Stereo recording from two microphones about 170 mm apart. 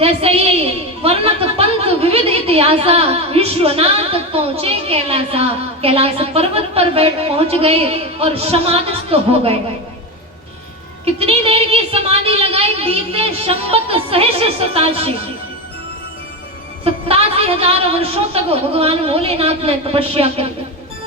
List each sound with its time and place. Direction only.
0.0 s a woman's voice: 35° right (ahead or behind)
11.0 s a woman's voice: 35° right (ahead or behind)
16.8 s a woman's voice: 35° right (ahead or behind)